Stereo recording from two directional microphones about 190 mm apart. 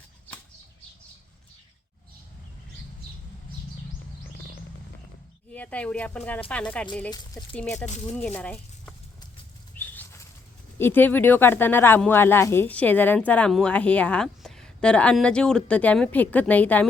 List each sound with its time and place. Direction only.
5.5 s speech: 5° left (ahead or behind)
9.7 s bird flight: 10° left (ahead or behind)
10.8 s speech: 10° left (ahead or behind)